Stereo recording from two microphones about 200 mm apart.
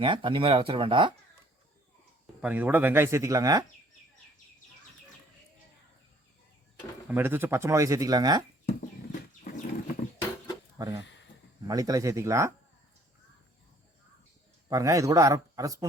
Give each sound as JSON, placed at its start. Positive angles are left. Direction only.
{"t": 0.0, "sound": "speech", "side_deg": -25}
{"t": 2.4, "sound": "speech", "side_deg": -10}
{"t": 7.1, "sound": "speech", "side_deg": -10}
{"t": 9.4, "sound": "livestock", "side_deg": 40}
{"t": 10.8, "sound": "speech", "side_deg": -15}
{"t": 14.7, "sound": "speech", "side_deg": -15}